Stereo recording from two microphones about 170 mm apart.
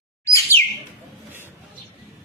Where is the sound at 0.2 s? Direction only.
20° left (ahead or behind).